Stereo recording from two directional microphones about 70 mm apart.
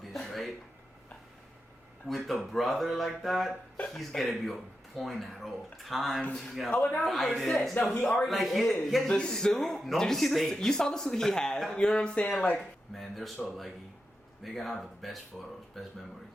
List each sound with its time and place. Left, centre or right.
0.2 s a sound: centre
2.0 s speech: centre
6.7 s speech: left
7.0 s speech: centre
12.5 s speech: centre
14.4 s speech: centre